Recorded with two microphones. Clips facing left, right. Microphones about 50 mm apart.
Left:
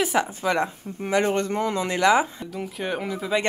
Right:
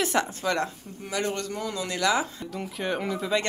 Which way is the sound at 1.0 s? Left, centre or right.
Left.